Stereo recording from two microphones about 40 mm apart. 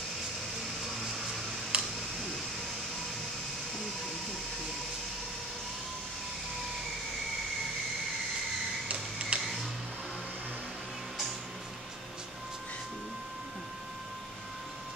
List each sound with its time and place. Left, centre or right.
1.7 s tick: right
8.8 s printer: right